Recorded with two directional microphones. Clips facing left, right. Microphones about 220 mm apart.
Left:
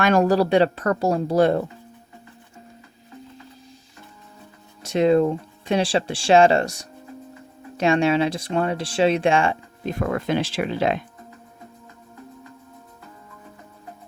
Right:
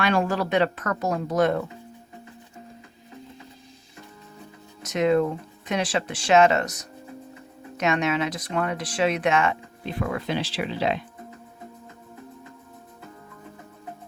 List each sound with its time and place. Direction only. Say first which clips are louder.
0.0 s speech: left 6 dB; 45° left (ahead or behind)
4.8 s speech: left 4 dB; 30° left (ahead or behind)
9.8 s speech: left 4 dB; 45° left (ahead or behind)